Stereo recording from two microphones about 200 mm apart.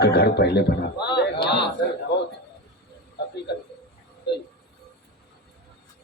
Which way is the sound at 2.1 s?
55° left (ahead or behind).